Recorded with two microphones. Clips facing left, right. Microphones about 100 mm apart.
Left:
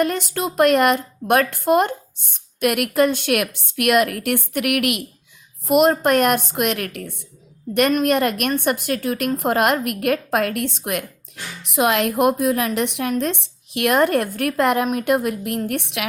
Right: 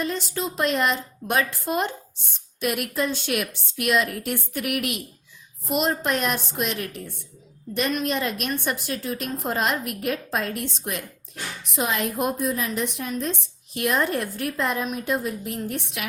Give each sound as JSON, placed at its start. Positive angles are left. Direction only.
{"t": 0.0, "sound": "a woman's voice", "side_deg": 60}
{"t": 5.6, "sound": "a woman's voice", "side_deg": 55}
{"t": 11.6, "sound": "a woman's voice", "side_deg": 75}